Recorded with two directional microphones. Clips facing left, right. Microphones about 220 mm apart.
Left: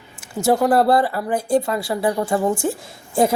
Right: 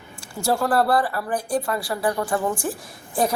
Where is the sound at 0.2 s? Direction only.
20° left (ahead or behind).